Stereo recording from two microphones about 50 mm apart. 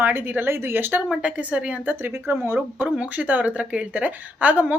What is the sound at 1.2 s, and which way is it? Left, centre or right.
Speech, right.